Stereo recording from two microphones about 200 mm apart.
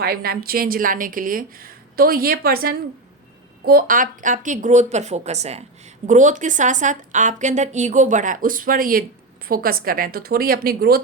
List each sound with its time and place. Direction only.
0.0 s a woman's voice: 50° right (ahead or behind)